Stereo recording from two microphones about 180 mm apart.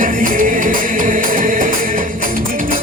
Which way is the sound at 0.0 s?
50° right (ahead or behind).